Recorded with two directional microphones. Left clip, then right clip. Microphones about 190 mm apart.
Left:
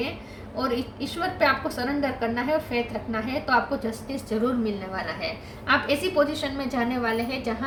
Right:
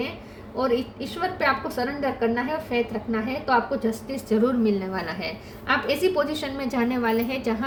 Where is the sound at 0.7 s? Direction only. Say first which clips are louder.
Right 3 dB; 40° right (ahead or behind).